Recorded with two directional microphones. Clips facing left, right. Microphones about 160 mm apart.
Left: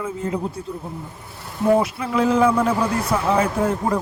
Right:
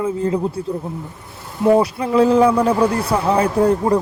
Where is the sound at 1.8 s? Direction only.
35° right (ahead or behind).